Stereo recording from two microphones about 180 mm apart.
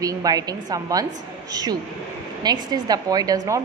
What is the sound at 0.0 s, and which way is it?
A woman's voice, 20° right (ahead or behind).